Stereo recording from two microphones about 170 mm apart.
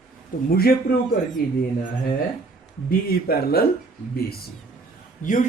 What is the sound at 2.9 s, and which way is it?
Speech, 65° left (ahead or behind).